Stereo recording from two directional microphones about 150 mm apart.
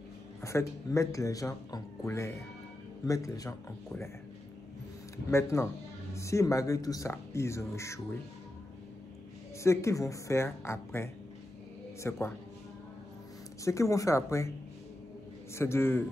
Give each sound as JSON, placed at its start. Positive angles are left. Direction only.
{"t": 0.4, "sound": "speech", "side_deg": 20}
{"t": 5.3, "sound": "a man's voice", "side_deg": 20}
{"t": 9.6, "sound": "a man's voice", "side_deg": 20}
{"t": 13.7, "sound": "speech", "side_deg": 20}
{"t": 15.5, "sound": "a man's voice", "side_deg": 15}